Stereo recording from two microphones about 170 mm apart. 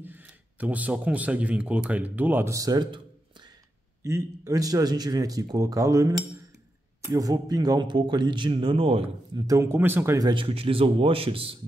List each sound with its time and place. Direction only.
0.0 s speech: 10° right (ahead or behind)
4.0 s speech: 20° right (ahead or behind)
9.4 s speech: 20° right (ahead or behind)